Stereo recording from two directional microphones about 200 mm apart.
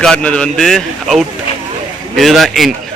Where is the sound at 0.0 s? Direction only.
5° left (ahead or behind).